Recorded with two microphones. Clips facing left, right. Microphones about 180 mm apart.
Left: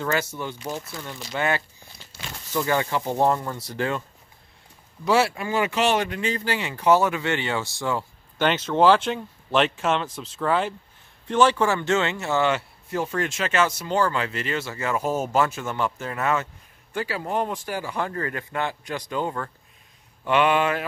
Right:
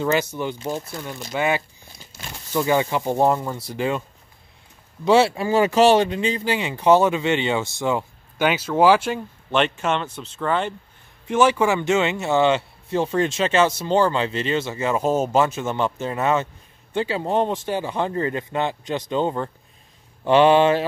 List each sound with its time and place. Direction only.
0.0 s speech: 20° right (ahead or behind)
5.0 s speech: 25° right (ahead or behind); by 10.7 s 5° left (ahead or behind)
11.2 s speech: 10° right (ahead or behind); by 20.8 s 30° right (ahead or behind)